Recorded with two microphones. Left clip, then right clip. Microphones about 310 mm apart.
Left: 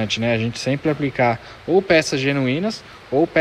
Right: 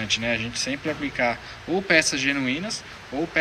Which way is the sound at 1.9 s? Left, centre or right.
Centre.